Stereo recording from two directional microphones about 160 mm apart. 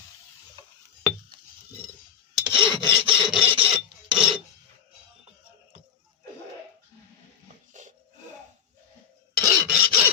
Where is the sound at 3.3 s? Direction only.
35° right (ahead or behind).